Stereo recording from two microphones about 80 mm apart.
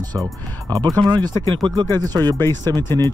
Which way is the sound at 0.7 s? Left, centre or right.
Right.